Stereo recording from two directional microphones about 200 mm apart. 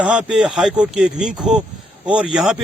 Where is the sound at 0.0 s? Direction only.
5° right (ahead or behind).